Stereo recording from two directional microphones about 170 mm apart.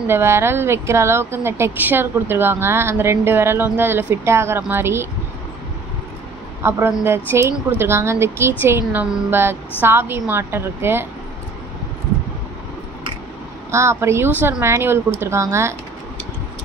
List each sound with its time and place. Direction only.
0.1 s speech: 15° right (ahead or behind)
6.6 s speech: 15° right (ahead or behind)
13.7 s speech: 15° right (ahead or behind)